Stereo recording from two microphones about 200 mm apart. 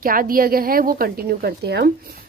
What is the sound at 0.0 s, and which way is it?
A woman's voice, 45° right (ahead or behind).